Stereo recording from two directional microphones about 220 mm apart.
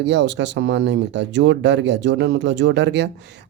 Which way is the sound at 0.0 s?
55° right (ahead or behind).